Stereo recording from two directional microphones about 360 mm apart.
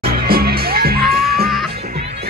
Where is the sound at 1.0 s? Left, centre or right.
Centre.